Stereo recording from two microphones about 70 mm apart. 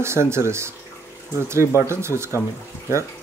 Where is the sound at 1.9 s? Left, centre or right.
Right.